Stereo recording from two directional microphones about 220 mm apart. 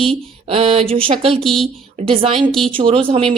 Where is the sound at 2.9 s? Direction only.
25° right (ahead or behind).